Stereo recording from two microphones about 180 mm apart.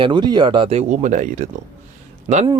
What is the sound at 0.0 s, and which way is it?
Speech, 25° right (ahead or behind).